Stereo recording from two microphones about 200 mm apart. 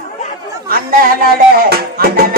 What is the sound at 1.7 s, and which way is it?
Music, 50° right (ahead or behind).